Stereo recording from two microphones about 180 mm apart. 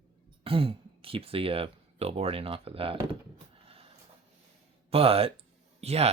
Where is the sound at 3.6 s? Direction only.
30° right (ahead or behind).